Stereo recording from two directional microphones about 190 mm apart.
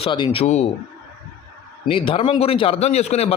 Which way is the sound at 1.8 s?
30° left (ahead or behind).